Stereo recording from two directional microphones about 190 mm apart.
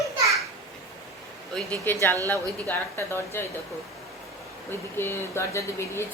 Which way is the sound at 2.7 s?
10° left (ahead or behind).